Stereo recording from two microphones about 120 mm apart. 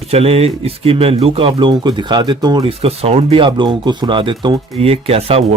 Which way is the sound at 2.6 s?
55° right (ahead or behind).